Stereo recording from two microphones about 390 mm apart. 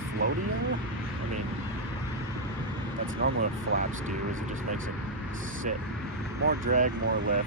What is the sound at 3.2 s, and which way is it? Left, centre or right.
Speech, right.